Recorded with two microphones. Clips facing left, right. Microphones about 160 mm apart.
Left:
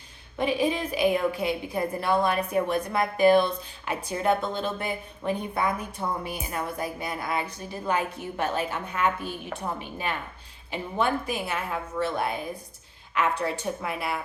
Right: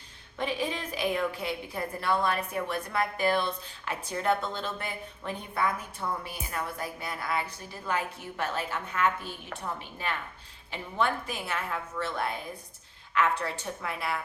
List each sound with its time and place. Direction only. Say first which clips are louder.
0.3 s a woman's voice: left 6 dB; 15° left (ahead or behind)